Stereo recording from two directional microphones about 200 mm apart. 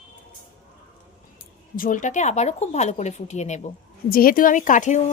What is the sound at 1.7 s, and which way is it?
A woman's voice, 45° left (ahead or behind).